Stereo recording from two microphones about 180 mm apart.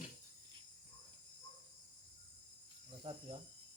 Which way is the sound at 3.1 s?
30° right (ahead or behind).